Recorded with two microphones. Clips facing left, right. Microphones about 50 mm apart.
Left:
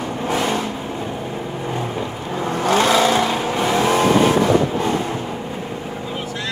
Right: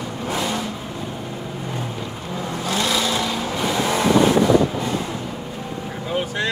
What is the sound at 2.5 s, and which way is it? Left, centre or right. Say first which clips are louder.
Vehicle: left 7 dB; left.